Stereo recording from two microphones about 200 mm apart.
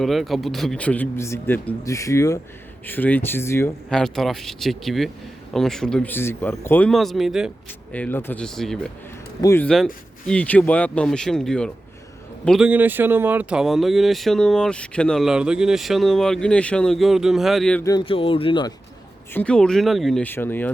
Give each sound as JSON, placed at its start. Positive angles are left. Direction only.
{"t": 0.0, "sound": "speech", "side_deg": 0}
{"t": 3.8, "sound": "speech", "side_deg": 0}
{"t": 7.9, "sound": "speech", "side_deg": 10}
{"t": 9.4, "sound": "speech", "side_deg": 15}
{"t": 9.6, "sound": "speech", "side_deg": 0}
{"t": 17.8, "sound": "a man's voice", "side_deg": 25}
{"t": 19.3, "sound": "speech", "side_deg": 5}